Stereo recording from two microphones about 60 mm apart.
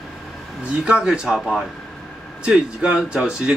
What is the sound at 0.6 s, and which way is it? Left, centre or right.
Speech, centre.